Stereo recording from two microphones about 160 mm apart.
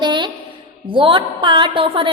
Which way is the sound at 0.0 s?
30° right (ahead or behind).